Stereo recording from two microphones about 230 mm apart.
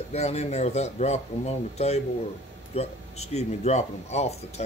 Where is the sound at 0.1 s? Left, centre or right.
Left.